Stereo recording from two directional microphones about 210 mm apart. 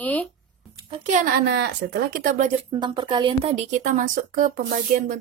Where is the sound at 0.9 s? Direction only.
35° right (ahead or behind).